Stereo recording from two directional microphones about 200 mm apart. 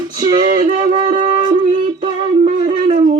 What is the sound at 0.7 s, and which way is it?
Music, 40° right (ahead or behind).